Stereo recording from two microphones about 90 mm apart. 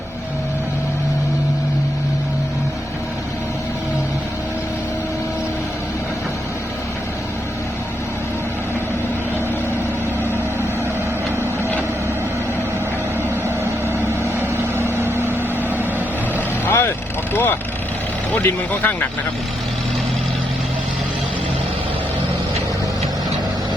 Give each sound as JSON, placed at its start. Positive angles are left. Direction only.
{"t": 16.6, "sound": "vehicle", "side_deg": 25}
{"t": 18.4, "sound": "speech", "side_deg": 20}